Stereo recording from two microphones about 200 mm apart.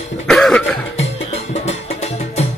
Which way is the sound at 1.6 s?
35° left (ahead or behind).